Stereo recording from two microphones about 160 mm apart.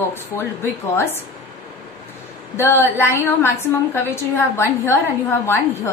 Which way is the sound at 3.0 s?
15° left (ahead or behind).